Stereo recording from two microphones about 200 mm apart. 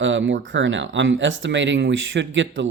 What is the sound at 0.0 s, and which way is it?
Speech, 65° right (ahead or behind).